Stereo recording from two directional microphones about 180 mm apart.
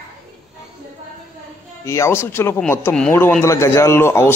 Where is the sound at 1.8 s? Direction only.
15° left (ahead or behind).